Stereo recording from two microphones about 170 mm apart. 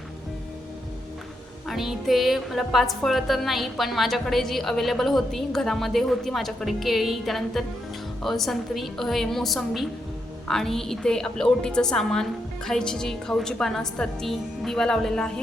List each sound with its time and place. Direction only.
1.6 s a woman's voice: centre (ahead or behind)